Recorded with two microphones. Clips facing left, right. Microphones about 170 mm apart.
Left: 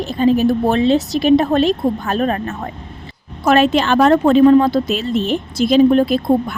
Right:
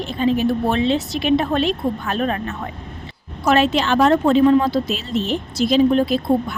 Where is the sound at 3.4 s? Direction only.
50° left (ahead or behind).